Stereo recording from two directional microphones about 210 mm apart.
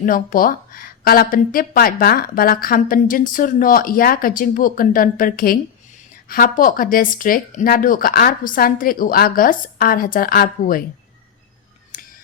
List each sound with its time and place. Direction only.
0.0 s speech: 40° left (ahead or behind)